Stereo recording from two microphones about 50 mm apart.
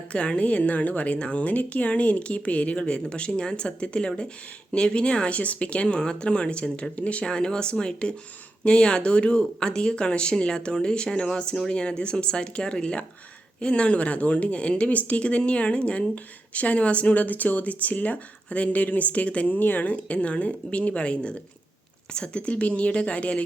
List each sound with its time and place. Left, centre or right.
0.1 s speech: left